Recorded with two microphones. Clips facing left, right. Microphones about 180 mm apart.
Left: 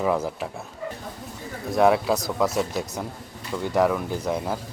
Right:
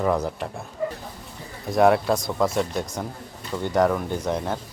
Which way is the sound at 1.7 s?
Centre (ahead or behind).